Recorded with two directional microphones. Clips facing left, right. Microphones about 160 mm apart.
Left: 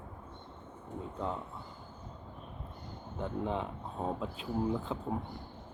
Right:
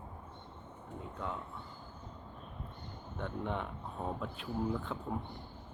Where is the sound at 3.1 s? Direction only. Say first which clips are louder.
Left 3 dB; 30° left (ahead or behind).